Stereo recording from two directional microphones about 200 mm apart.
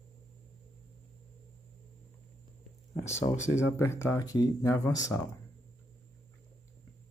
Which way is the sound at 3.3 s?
15° left (ahead or behind).